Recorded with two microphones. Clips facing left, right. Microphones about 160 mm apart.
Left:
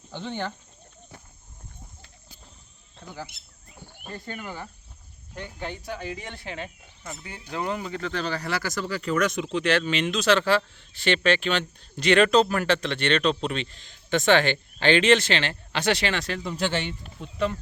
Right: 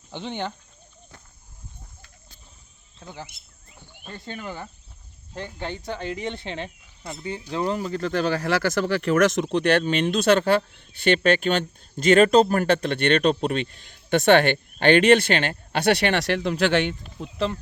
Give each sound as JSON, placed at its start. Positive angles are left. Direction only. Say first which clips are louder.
{"t": 0.1, "sound": "speech", "louder": "right 1 dB", "side_deg": -20}
{"t": 4.3, "sound": "speech", "louder": "right 3 dB", "side_deg": -25}
{"t": 9.4, "sound": "speech", "louder": "right 4 dB", "side_deg": -55}